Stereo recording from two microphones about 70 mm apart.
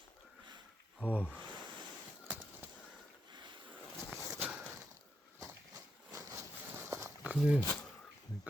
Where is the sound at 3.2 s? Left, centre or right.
Right.